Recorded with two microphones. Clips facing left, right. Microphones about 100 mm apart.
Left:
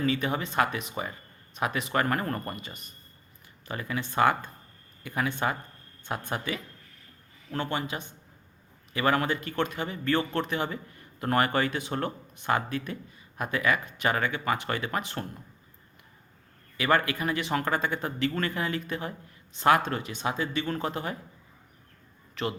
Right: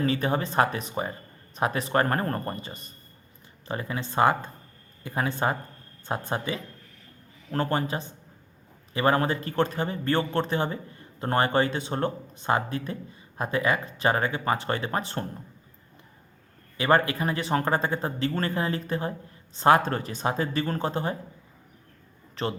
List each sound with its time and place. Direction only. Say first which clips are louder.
0.0 s a man's voice: right 2 dB; 35° right (ahead or behind)
7.5 s a man's voice: right 4 dB; 40° right (ahead or behind)
16.7 s a man's voice: right 3 dB; 30° right (ahead or behind)
22.4 s a man's voice: right 2 dB; 35° right (ahead or behind)